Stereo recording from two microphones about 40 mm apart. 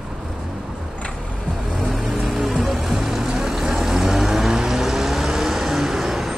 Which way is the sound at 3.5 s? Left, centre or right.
Centre.